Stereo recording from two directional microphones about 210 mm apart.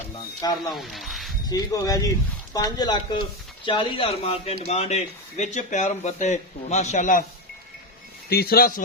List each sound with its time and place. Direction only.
0.4 s speech: 20° left (ahead or behind)
0.8 s speech: centre (ahead or behind)
1.5 s speech: 15° left (ahead or behind); by 7.3 s 40° left (ahead or behind)
8.3 s speech: 45° left (ahead or behind)